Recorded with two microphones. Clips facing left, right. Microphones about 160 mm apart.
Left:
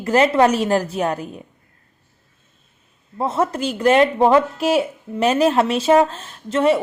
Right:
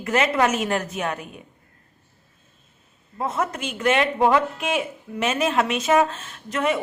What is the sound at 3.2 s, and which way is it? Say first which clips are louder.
A woman's voice: left 6 dB; 30° left (ahead or behind).